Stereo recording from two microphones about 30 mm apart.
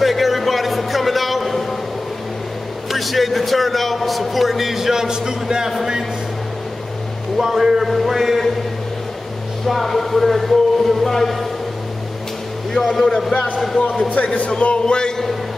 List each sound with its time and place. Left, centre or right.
0.0 s a sound: centre
2.9 s a man's voice: centre; by 5.7 s right
7.3 s a man's voice: centre
9.7 s a man's voice: centre
12.7 s speech: centre
14.2 s a man's voice: left